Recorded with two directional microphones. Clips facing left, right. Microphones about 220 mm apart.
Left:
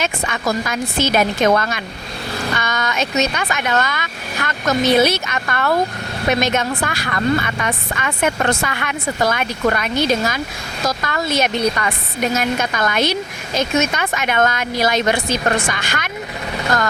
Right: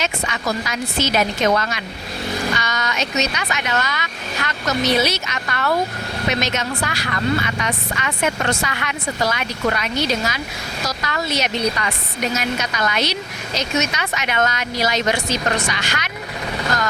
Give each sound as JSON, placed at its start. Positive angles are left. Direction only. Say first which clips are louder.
{"t": 0.0, "sound": "a woman's voice", "louder": "left 3 dB", "side_deg": 50}